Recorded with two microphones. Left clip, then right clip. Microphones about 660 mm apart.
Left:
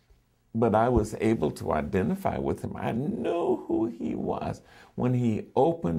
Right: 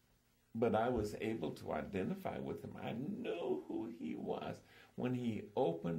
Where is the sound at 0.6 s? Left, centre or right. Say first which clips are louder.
Left 12 dB; left.